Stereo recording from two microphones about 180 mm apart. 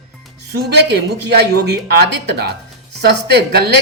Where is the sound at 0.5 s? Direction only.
65° right (ahead or behind).